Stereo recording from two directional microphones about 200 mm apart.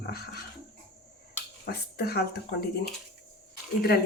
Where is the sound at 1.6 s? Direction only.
50° left (ahead or behind).